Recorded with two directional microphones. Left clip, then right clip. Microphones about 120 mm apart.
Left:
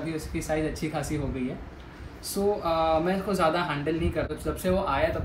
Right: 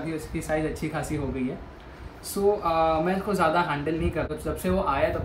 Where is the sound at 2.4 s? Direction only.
5° right (ahead or behind).